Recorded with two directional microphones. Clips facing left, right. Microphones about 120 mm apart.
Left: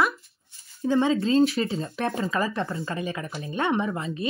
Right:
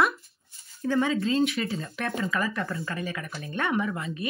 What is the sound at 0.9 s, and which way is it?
Speech, 25° left (ahead or behind).